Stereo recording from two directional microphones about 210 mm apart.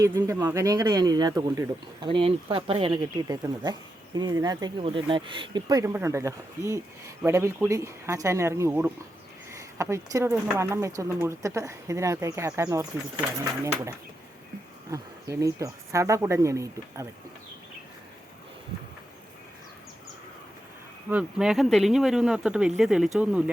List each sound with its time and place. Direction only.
0.0 s speech: 15° right (ahead or behind)
14.8 s speech: 15° right (ahead or behind)
21.1 s speech: 5° right (ahead or behind)